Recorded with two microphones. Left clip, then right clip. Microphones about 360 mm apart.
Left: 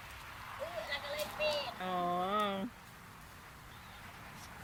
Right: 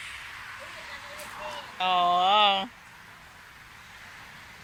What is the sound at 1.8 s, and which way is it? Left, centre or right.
Speech, right.